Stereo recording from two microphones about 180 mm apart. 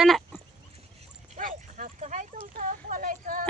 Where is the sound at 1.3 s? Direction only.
45° right (ahead or behind).